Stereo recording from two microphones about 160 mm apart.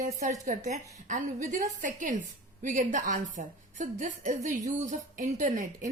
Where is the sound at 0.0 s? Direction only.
55° right (ahead or behind).